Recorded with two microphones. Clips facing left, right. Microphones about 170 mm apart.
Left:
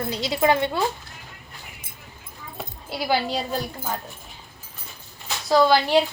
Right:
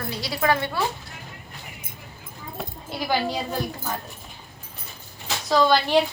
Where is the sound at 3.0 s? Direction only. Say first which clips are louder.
Left 2 dB; 10° left (ahead or behind).